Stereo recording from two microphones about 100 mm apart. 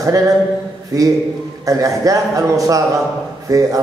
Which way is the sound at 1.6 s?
35° right (ahead or behind).